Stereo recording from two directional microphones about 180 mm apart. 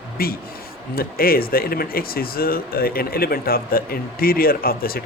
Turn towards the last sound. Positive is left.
turn(degrees=55)  # may be behind; listen again after turning